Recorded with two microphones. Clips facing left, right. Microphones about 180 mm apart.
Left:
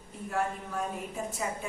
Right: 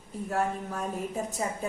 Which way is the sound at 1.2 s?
40° right (ahead or behind).